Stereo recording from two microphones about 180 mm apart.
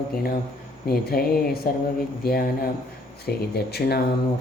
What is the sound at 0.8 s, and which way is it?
Speech, 55° left (ahead or behind).